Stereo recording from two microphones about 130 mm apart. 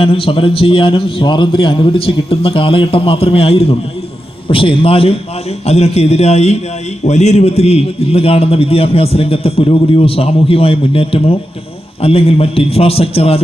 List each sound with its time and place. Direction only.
0.0 s a man's voice: 45° left (ahead or behind)